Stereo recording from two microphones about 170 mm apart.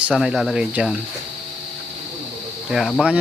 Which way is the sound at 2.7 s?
Centre (ahead or behind).